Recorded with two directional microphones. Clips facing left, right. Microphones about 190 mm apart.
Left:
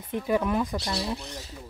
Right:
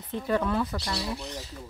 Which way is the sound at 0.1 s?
15° left (ahead or behind).